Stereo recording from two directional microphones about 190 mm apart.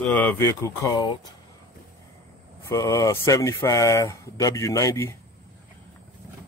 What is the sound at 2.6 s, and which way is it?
Speech, 15° left (ahead or behind).